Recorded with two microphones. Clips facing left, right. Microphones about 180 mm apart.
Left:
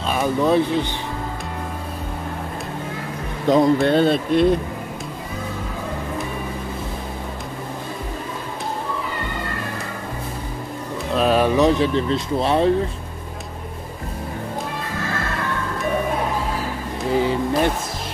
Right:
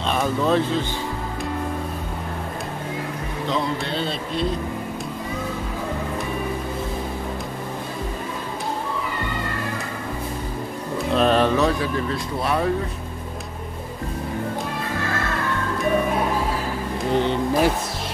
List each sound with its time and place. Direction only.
0.4 s speech: 15° left (ahead or behind)
3.5 s speech: 45° left (ahead or behind)
11.1 s speech: 5° left (ahead or behind); by 12.7 s 25° left (ahead or behind)
17.0 s speech: 5° left (ahead or behind)